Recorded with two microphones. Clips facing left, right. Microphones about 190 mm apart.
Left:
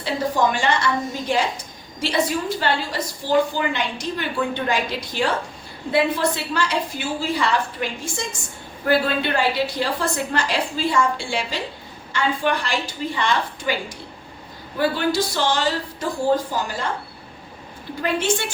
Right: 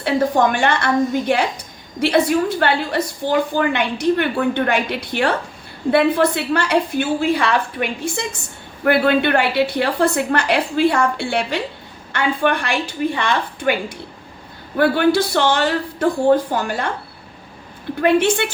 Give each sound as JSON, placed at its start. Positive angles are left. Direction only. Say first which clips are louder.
{"t": 0.0, "sound": "a woman's voice", "louder": "right 5 dB", "side_deg": -60}
{"t": 14.8, "sound": "a woman's voice", "louder": "right 6 dB", "side_deg": -60}
{"t": 18.0, "sound": "a woman's voice", "louder": "right 7 dB", "side_deg": -65}